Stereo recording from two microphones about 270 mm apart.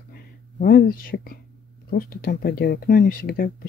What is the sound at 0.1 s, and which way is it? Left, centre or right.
Whispering, left.